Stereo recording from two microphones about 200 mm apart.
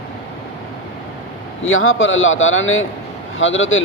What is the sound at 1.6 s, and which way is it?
A man's voice, 85° left.